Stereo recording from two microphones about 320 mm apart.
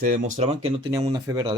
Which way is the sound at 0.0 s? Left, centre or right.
Right.